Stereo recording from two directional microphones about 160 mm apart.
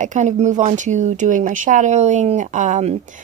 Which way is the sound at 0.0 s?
50° right (ahead or behind).